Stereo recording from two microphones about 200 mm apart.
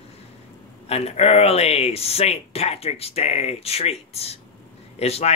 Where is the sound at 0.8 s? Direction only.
30° left (ahead or behind).